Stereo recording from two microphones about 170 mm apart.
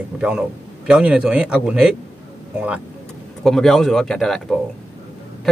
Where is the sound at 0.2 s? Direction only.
5° right (ahead or behind).